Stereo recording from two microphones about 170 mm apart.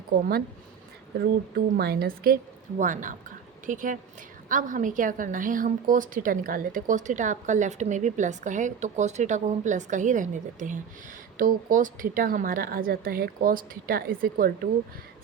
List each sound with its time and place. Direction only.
1.5 s a woman's voice: 70° right (ahead or behind)